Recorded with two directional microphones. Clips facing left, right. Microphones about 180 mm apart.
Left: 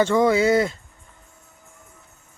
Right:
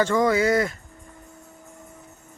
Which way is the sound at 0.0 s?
25° left (ahead or behind).